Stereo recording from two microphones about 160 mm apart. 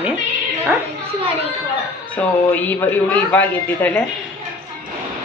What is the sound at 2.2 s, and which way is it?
A man's voice, 10° left (ahead or behind).